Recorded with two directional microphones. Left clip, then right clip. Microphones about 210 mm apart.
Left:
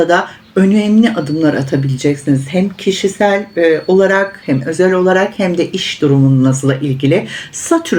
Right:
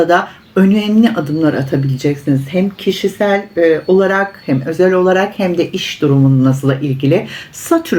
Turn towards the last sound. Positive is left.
turn(degrees=5)  # may be behind; listen again after turning